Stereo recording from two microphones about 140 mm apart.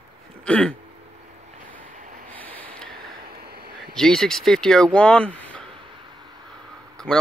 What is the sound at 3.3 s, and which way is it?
Vehicle, 90° right.